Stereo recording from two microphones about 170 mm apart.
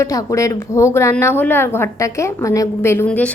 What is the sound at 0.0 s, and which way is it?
A woman's voice, 20° left (ahead or behind).